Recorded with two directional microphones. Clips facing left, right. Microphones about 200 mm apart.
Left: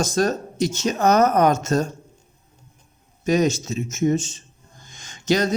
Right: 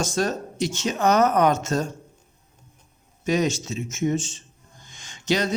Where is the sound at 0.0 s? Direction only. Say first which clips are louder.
Left 3 dB; 40° left (ahead or behind).